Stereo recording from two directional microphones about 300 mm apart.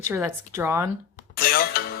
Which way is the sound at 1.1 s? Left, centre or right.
Left.